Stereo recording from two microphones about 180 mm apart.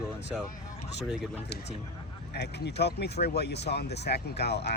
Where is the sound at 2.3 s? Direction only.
65° left (ahead or behind).